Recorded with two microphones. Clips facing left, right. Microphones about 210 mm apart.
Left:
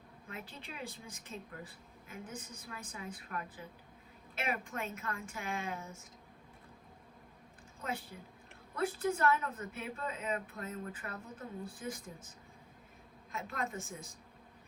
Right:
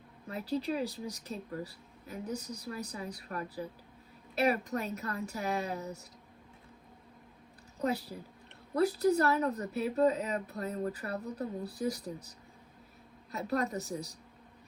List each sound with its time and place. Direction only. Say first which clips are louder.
0.3 s speech: right 14 dB; 35° right (ahead or behind)
7.8 s speech: right 8 dB; 40° right (ahead or behind)
13.3 s speech: right 7 dB; 40° right (ahead or behind)